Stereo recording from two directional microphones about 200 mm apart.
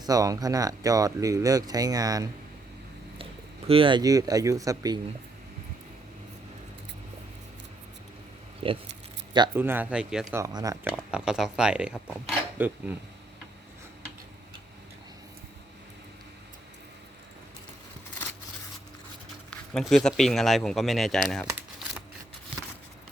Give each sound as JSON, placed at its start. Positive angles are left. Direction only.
{"t": 0.0, "sound": "speech", "side_deg": -20}
{"t": 3.7, "sound": "speech", "side_deg": -25}
{"t": 8.6, "sound": "speech", "side_deg": -30}
{"t": 9.6, "sound": "speech", "side_deg": -10}
{"t": 10.3, "sound": "speech", "side_deg": -15}
{"t": 10.9, "sound": "speech", "side_deg": -5}
{"t": 19.5, "sound": "speech", "side_deg": 5}